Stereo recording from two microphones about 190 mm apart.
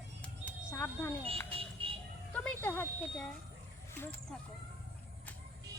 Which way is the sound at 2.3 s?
10° left (ahead or behind).